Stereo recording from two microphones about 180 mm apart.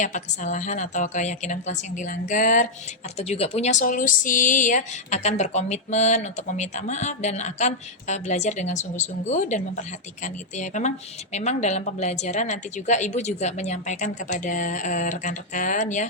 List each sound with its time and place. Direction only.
0.0 s speech: 45° left (ahead or behind)
2.0 s a sound: 45° left (ahead or behind)
3.2 s speech: 35° left (ahead or behind)